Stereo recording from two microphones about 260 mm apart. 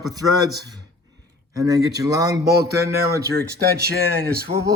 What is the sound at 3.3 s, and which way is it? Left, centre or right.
Speech, right.